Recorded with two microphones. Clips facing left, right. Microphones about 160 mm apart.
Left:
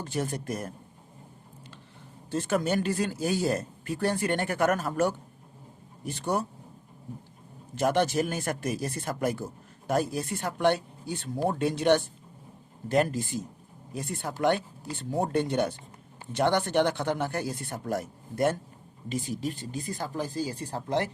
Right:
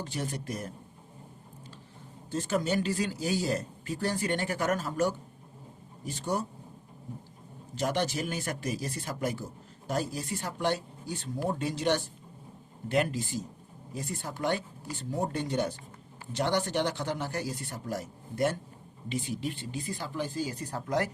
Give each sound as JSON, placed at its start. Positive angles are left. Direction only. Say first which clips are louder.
{"t": 0.0, "sound": "speech", "louder": "left 4 dB", "side_deg": 50}
{"t": 2.3, "sound": "speech", "louder": "left 2 dB", "side_deg": 55}
{"t": 7.8, "sound": "speech", "louder": "left 5 dB", "side_deg": 55}
{"t": 12.9, "sound": "speech", "louder": "left 3 dB", "side_deg": 45}
{"t": 13.9, "sound": "speech", "louder": "left 3 dB", "side_deg": 65}